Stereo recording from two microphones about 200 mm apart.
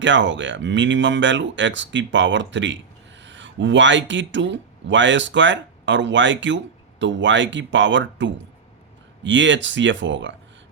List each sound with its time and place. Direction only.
0.0 s speech: 65° right (ahead or behind)